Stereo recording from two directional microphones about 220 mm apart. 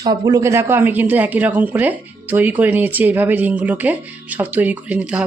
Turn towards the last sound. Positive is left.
turn(degrees=-5)  # may be behind; listen again after turning